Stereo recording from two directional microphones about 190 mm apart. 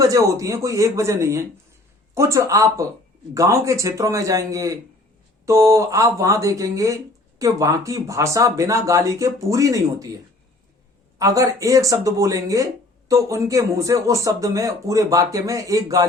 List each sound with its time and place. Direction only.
0.0 s speech: 15° right (ahead or behind)
11.2 s speech: 15° right (ahead or behind)